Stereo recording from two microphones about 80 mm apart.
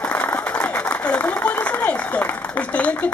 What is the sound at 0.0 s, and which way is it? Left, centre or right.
Speech, left.